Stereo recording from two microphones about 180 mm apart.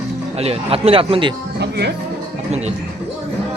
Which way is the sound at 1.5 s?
70° right (ahead or behind).